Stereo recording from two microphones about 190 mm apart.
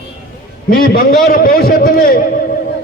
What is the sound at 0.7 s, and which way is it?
A man's voice, 50° left (ahead or behind).